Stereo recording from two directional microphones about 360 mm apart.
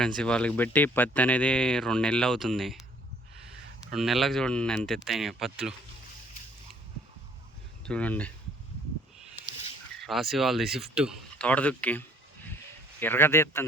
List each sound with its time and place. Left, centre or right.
0.2 s speech: centre
3.9 s speech: centre
7.9 s speech: centre
10.0 s a man's voice: centre